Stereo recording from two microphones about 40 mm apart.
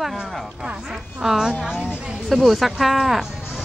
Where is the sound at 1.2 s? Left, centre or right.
Centre.